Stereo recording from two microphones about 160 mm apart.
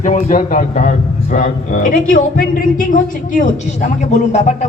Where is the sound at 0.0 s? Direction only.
55° left (ahead or behind).